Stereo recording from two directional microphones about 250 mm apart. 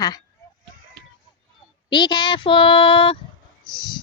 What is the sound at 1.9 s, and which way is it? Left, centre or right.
Speech, centre.